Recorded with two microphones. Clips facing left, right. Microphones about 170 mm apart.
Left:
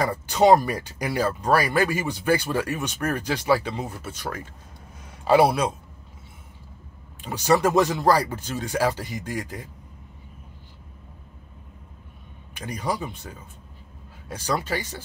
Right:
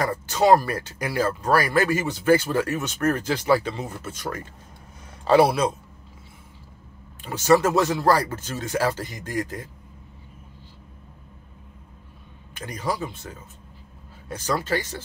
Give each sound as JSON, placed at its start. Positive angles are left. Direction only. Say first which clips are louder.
{"t": 0.0, "sound": "speech", "louder": "left 2 dB", "side_deg": 15}
{"t": 7.2, "sound": "speech", "louder": "right 2 dB", "side_deg": 15}
{"t": 12.5, "sound": "speech", "louder": "even", "side_deg": 15}
{"t": 14.3, "sound": "speech", "louder": "right 2 dB", "side_deg": 10}